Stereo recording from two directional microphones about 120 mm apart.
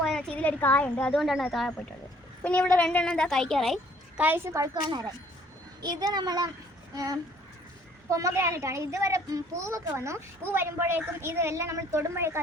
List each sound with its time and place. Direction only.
0.0 s a child's voice: 5° left (ahead or behind)
4.2 s a woman's voice: 20° right (ahead or behind)